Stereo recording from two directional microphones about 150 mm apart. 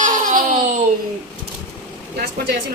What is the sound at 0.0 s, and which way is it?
Baby laughter, 65° right (ahead or behind).